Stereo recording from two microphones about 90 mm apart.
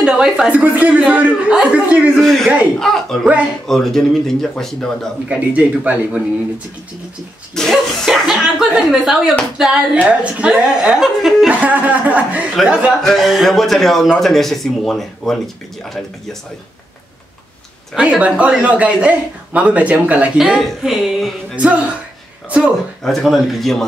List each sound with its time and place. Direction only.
0.0 s a woman's voice: 5° right (ahead or behind)
0.5 s speech: 15° right (ahead or behind)
2.1 s speech: centre (ahead or behind)
5.3 s speech: 15° right (ahead or behind)
7.5 s speech: 5° left (ahead or behind); by 12.4 s 15° right (ahead or behind)
13.0 s speech: centre (ahead or behind)
17.9 s speech: 15° right (ahead or behind)
21.5 s speech: 15° right (ahead or behind)
23.0 s speech: centre (ahead or behind)